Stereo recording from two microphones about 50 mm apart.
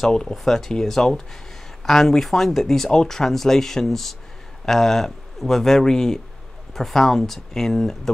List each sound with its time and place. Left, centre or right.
0.3 s speech: centre